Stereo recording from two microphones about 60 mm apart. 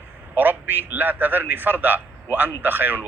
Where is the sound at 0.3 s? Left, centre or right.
Right.